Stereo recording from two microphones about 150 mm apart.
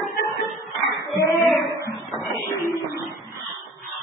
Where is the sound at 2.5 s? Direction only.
20° right (ahead or behind).